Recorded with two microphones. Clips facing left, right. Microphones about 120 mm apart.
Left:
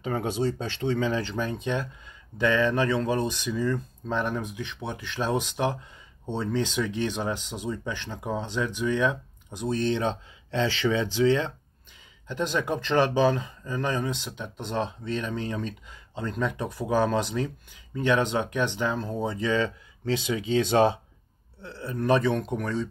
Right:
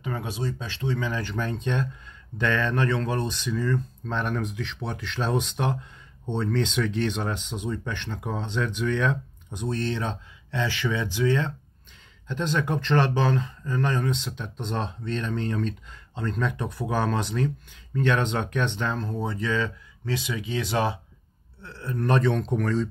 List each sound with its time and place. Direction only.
0.1 s speech: 30° left (ahead or behind)
21.6 s speech: 15° left (ahead or behind)